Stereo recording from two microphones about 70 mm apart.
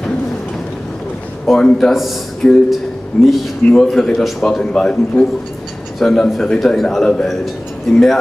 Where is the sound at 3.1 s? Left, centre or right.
Left.